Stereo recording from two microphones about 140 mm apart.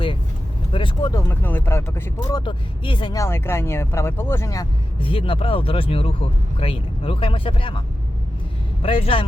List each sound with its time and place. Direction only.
0.7 s speech: 35° left (ahead or behind)
1.1 s speech: 15° left (ahead or behind)
2.3 s speech: 35° left (ahead or behind)
3.2 s speech: 20° left (ahead or behind)
4.9 s speech: 40° left (ahead or behind)